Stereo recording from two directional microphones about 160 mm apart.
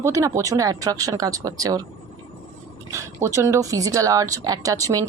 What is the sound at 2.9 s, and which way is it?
Speech, 20° right (ahead or behind).